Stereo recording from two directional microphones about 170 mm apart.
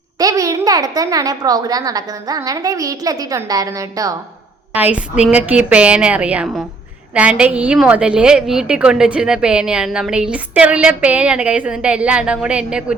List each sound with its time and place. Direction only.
0.2 s a child's voice: 20° right (ahead or behind)
4.7 s a woman's voice: 10° right (ahead or behind)